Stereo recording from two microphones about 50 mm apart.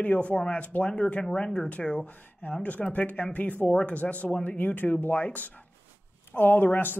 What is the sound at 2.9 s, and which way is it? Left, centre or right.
Speech, left.